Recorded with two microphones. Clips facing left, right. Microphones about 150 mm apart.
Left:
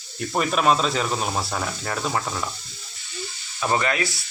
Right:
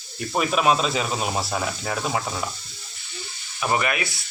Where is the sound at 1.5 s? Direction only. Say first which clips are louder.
Right 1 dB; 5° right (ahead or behind).